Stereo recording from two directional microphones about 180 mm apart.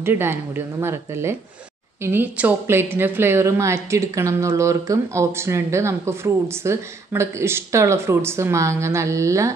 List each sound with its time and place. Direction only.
0.0 s a woman's voice: 15° right (ahead or behind)